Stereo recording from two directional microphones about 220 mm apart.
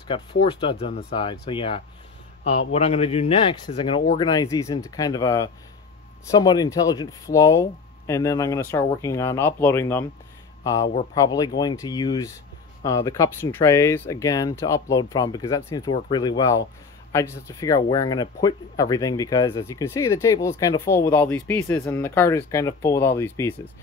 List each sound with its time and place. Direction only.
0.1 s a man's voice: 20° left (ahead or behind)